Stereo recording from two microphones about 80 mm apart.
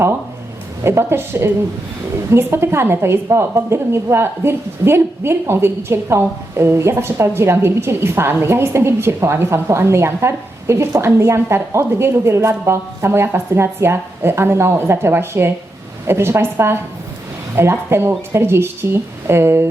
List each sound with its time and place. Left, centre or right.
0.9 s a woman's voice: right